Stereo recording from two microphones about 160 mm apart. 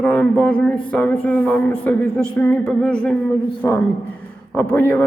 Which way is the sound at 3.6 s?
20° left (ahead or behind).